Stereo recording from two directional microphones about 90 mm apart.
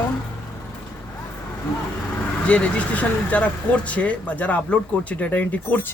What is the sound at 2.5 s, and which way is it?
Speech, 10° left (ahead or behind).